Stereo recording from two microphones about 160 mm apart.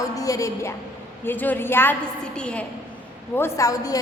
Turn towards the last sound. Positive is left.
turn(degrees=20)  # may be behind; listen again after turning